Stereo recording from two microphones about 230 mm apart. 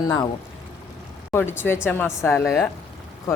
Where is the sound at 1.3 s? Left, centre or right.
Centre.